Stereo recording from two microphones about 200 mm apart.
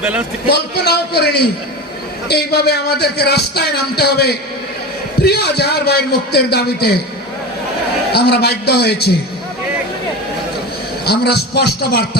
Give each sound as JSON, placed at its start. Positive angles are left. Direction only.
{"t": 0.0, "sound": "a man's voice", "side_deg": -10}
{"t": 0.5, "sound": "a man's voice", "side_deg": 55}
{"t": 8.1, "sound": "a man's voice", "side_deg": 55}
{"t": 11.0, "sound": "a man's voice", "side_deg": 55}